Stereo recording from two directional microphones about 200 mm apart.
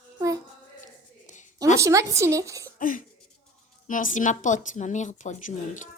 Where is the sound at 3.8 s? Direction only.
40° left (ahead or behind).